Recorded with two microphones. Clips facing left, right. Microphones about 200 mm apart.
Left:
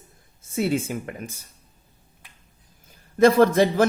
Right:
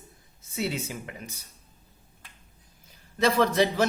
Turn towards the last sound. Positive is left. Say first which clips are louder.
# left 6 dB
turn(degrees=50)  # may be behind; listen again after turning